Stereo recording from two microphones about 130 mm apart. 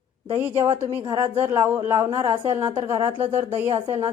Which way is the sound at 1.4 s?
20° right (ahead or behind).